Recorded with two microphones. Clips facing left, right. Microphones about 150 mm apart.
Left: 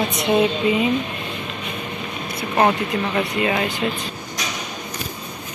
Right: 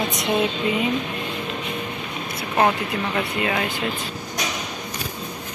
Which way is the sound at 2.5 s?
5° left (ahead or behind).